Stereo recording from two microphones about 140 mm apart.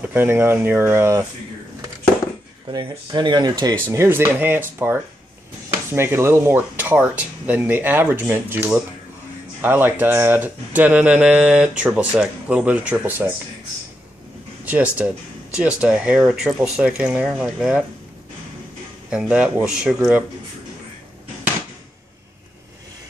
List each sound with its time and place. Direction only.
0.0 s speech: 15° right (ahead or behind)
2.7 s speech: 30° right (ahead or behind); by 13.3 s 10° right (ahead or behind)
14.7 s speech: 10° right (ahead or behind)
19.0 s speech: 10° right (ahead or behind)